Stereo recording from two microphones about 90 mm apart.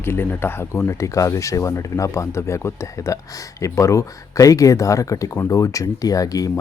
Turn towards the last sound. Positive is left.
turn(degrees=40)  # may be behind; listen again after turning